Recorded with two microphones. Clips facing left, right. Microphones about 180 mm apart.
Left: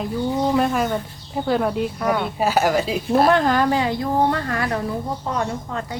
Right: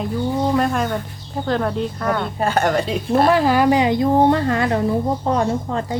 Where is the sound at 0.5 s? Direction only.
5° left (ahead or behind).